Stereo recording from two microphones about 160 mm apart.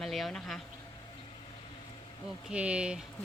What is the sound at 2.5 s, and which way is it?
Speech, 5° right (ahead or behind).